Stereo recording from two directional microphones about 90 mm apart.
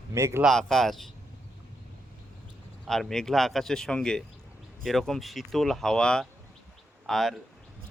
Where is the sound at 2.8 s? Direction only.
5° left (ahead or behind).